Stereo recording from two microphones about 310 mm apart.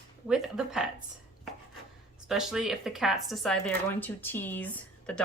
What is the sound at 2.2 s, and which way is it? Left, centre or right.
Speech, centre.